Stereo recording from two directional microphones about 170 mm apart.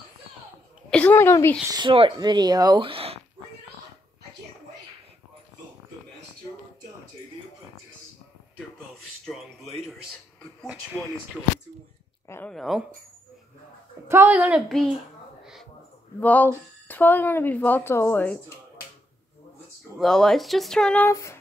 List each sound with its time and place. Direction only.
0.8 s speech: 10° left (ahead or behind)
1.7 s speech: 30° right (ahead or behind)
12.3 s speech: 10° left (ahead or behind)
12.5 s speech: centre (ahead or behind)
14.0 s speech: 15° right (ahead or behind)
16.2 s speech: 10° left (ahead or behind)
20.0 s speech: 5° left (ahead or behind)
21.1 s speech: 15° left (ahead or behind)